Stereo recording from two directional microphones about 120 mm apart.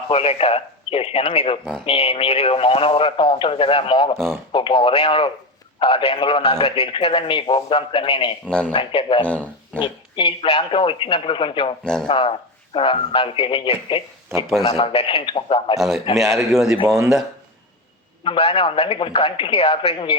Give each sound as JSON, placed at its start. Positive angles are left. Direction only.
{"t": 0.1, "sound": "speech", "side_deg": 55}
{"t": 6.5, "sound": "speech", "side_deg": 55}
{"t": 8.4, "sound": "speech", "side_deg": 10}
{"t": 8.7, "sound": "speech", "side_deg": 45}
{"t": 9.2, "sound": "speech", "side_deg": 10}
{"t": 9.8, "sound": "speech", "side_deg": 45}
{"t": 11.8, "sound": "speech", "side_deg": 5}
{"t": 12.0, "sound": "speech", "side_deg": 45}
{"t": 16.5, "sound": "speech", "side_deg": -5}
{"t": 18.2, "sound": "speech", "side_deg": 50}